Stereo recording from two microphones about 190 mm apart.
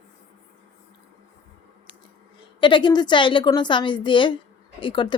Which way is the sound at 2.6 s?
25° left (ahead or behind).